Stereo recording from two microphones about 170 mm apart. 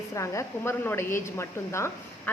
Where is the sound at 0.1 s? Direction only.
15° left (ahead or behind).